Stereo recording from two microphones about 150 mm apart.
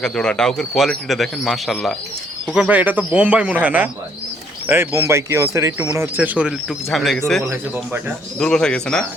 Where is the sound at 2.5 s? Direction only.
10° right (ahead or behind).